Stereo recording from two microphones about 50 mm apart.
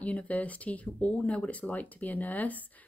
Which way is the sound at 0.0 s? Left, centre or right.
Left.